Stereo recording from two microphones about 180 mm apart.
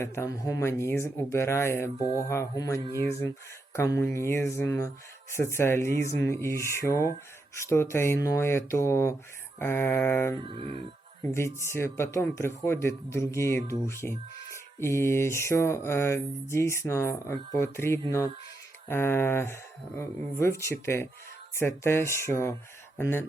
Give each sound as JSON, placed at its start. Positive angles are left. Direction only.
{"t": 0.0, "sound": "mantra", "side_deg": 15}
{"t": 10.4, "sound": "speech", "side_deg": -30}
{"t": 11.2, "sound": "mantra", "side_deg": 15}